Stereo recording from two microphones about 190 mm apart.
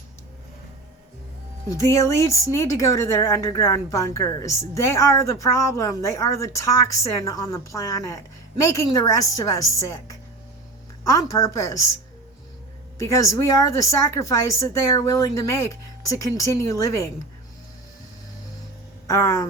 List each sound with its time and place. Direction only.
1.7 s a woman's voice: 15° left (ahead or behind)
13.0 s a woman's voice: 15° left (ahead or behind)
19.0 s speech: 15° left (ahead or behind)